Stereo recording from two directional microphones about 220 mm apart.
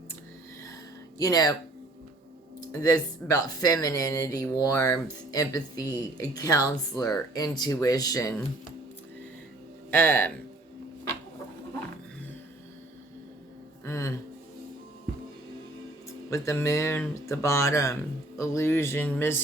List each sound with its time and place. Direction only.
1.2 s speech: 15° left (ahead or behind)
2.6 s speech: 15° left (ahead or behind)
9.9 s speech: 10° left (ahead or behind)
13.8 s music: 15° left (ahead or behind)
16.0 s speech: 15° left (ahead or behind)